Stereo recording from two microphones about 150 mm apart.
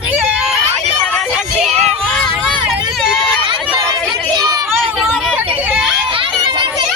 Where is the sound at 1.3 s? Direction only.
Centre (ahead or behind).